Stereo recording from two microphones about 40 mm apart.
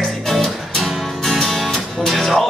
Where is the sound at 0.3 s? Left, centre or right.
Centre.